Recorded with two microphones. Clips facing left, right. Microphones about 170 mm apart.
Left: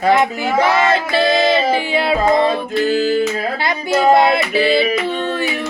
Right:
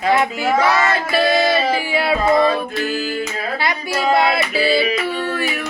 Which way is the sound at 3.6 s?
25° left (ahead or behind).